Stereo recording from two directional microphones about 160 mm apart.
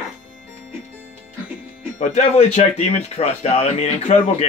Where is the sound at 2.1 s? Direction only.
40° left (ahead or behind).